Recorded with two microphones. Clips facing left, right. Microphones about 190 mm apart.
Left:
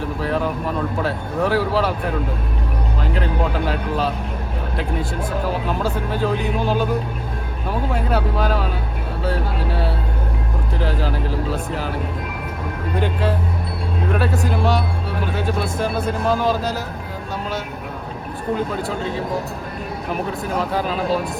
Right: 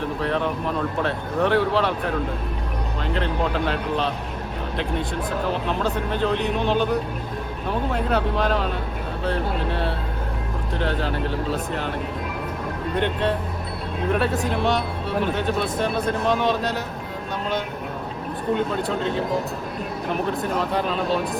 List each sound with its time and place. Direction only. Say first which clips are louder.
0.2 s speech: left 3 dB; 5° left (ahead or behind)
3.0 s speech: left 1 dB; 5° left (ahead or behind)
5.6 s speech: left 1 dB; 5° left (ahead or behind)
13.0 s speech: left 1 dB; 5° left (ahead or behind)
18.5 s speech: even; centre (ahead or behind)